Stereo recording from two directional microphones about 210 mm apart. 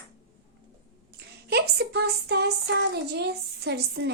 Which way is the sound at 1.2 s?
50° right (ahead or behind).